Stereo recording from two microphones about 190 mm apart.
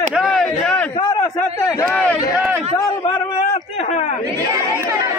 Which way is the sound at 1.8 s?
5° left (ahead or behind).